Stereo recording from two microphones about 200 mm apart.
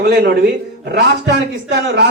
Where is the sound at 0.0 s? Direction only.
55° right (ahead or behind).